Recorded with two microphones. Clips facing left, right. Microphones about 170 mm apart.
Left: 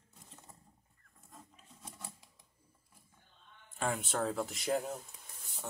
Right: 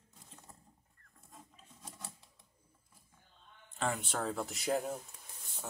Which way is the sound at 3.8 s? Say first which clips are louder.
Left 1 dB; 5° left (ahead or behind).